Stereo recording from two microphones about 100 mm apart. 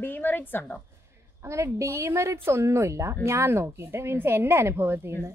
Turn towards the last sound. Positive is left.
turn(degrees=-20)  # may be behind; listen again after turning